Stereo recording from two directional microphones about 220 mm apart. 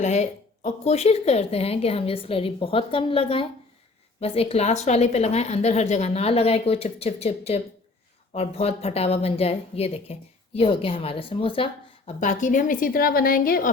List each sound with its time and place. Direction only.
0.0 s a woman's voice: 30° left (ahead or behind)